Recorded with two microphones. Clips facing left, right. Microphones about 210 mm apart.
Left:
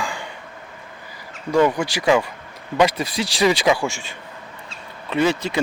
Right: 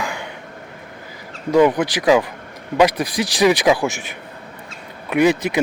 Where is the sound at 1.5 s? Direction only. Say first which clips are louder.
Right 3 dB; 15° right (ahead or behind).